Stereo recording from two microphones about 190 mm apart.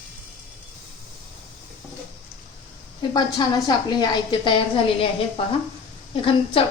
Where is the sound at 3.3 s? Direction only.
20° left (ahead or behind).